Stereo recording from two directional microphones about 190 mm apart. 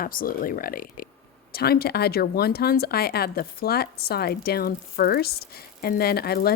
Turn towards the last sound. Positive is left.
turn(degrees=55)  # may be behind; listen again after turning